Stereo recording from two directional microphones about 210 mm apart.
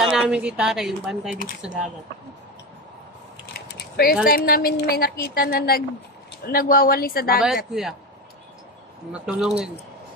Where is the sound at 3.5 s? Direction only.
45° left (ahead or behind).